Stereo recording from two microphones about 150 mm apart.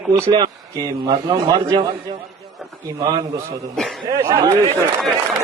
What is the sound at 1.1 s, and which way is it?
Speech, 30° right (ahead or behind).